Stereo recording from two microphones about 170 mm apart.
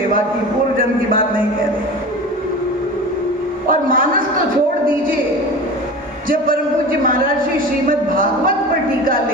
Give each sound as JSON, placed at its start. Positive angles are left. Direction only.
{"t": 3.7, "sound": "a man's voice", "side_deg": -55}
{"t": 6.2, "sound": "speech", "side_deg": -55}
{"t": 7.9, "sound": "speech", "side_deg": -55}